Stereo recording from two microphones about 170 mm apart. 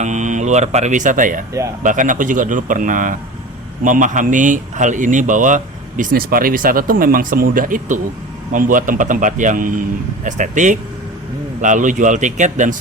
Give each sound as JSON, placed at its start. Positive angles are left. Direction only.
{"t": 0.0, "sound": "speech", "side_deg": -45}